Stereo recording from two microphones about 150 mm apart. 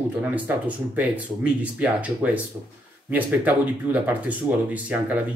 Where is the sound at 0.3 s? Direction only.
10° right (ahead or behind).